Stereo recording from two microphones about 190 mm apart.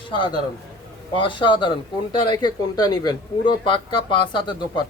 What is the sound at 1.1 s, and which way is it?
Speech, 25° left (ahead or behind).